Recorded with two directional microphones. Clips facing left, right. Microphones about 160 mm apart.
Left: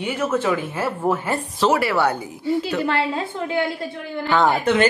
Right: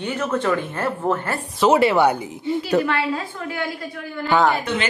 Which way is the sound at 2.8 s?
25° left (ahead or behind).